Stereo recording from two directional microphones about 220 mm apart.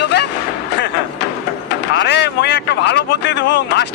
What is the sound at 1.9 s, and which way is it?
Speech, 50° left (ahead or behind).